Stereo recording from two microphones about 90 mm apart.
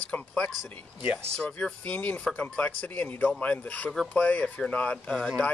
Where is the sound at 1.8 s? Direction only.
15° left (ahead or behind).